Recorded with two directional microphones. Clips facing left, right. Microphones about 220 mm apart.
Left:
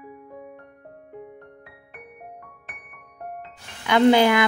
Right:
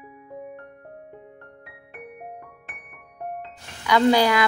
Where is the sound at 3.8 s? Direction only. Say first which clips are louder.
Left 2 dB; 25° left (ahead or behind).